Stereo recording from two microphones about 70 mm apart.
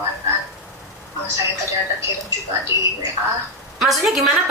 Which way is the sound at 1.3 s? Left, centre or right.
Right.